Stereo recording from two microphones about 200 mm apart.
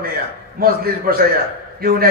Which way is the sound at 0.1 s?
45° right (ahead or behind).